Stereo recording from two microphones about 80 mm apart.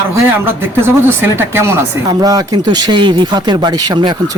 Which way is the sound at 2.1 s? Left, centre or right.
Right.